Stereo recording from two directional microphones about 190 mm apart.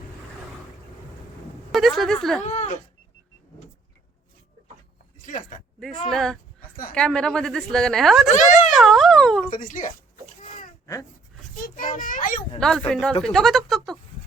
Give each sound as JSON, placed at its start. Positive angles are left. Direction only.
{"t": 1.7, "sound": "a woman's voice", "side_deg": 0}
{"t": 2.4, "sound": "speech", "side_deg": 35}
{"t": 5.2, "sound": "speech", "side_deg": 45}
{"t": 6.1, "sound": "a woman's voice", "side_deg": 0}
{"t": 8.3, "sound": "speech", "side_deg": 40}
{"t": 8.7, "sound": "a woman's voice", "side_deg": 0}
{"t": 9.5, "sound": "speech", "side_deg": 45}
{"t": 11.6, "sound": "a child's voice", "side_deg": 45}
{"t": 12.5, "sound": "a woman's voice", "side_deg": 5}